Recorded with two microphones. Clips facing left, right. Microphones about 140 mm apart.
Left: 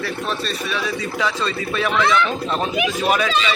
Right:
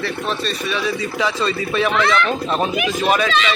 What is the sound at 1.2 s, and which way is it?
Speech, centre (ahead or behind).